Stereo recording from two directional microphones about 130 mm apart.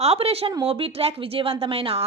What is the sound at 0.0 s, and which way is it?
A woman's voice, 50° right (ahead or behind).